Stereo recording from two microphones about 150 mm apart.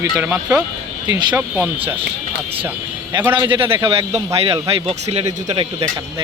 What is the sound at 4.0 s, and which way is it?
Speech, 20° right (ahead or behind).